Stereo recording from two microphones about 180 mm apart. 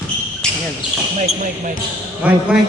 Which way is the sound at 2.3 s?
5° right (ahead or behind).